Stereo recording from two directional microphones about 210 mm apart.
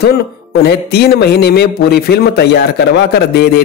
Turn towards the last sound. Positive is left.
turn(degrees=50)  # may be behind; listen again after turning